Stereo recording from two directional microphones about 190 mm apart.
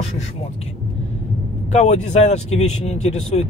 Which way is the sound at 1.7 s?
35° left (ahead or behind).